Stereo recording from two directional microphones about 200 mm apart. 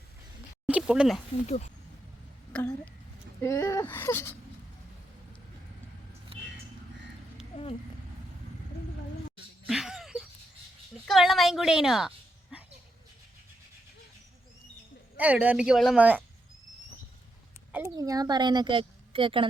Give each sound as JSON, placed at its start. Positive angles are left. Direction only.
{"t": 0.7, "sound": "a sound", "side_deg": -5}
{"t": 1.5, "sound": "speech", "side_deg": 35}
{"t": 2.5, "sound": "speech", "side_deg": 5}
{"t": 6.3, "sound": "vehicle", "side_deg": -30}
{"t": 7.5, "sound": "a sound", "side_deg": 30}
{"t": 9.6, "sound": "a sound", "side_deg": 0}
{"t": 11.0, "sound": "speech", "side_deg": 0}
{"t": 15.2, "sound": "speech", "side_deg": -5}
{"t": 17.7, "sound": "a woman's voice", "side_deg": -15}